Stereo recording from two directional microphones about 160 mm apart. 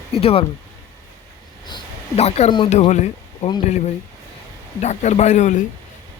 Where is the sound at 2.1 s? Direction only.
40° left (ahead or behind).